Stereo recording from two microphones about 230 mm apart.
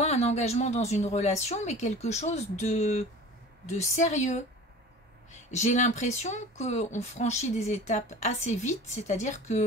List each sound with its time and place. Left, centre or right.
0.0 s a woman's voice: left